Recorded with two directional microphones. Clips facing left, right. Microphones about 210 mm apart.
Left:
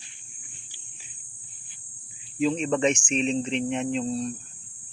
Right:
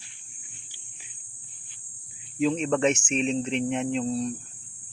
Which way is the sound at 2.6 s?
5° right (ahead or behind).